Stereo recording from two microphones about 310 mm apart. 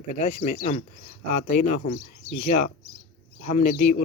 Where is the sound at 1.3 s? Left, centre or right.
Left.